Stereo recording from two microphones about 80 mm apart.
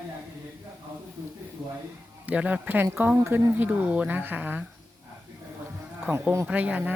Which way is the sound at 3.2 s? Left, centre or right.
Right.